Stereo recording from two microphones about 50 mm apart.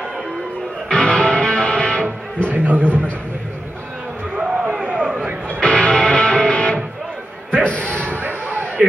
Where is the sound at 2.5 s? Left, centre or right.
Right.